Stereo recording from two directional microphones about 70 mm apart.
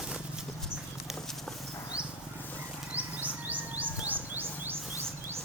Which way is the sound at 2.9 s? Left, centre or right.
Right.